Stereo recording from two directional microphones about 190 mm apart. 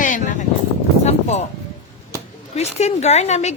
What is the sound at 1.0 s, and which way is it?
Music, 35° left (ahead or behind).